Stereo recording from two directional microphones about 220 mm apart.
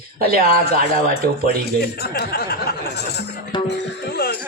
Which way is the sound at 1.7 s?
45° left (ahead or behind).